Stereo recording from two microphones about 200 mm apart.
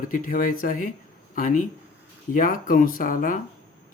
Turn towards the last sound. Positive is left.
turn(degrees=45)  # may be behind; listen again after turning